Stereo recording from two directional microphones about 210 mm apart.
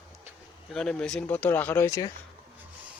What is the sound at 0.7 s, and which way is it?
Speech, 5° left (ahead or behind).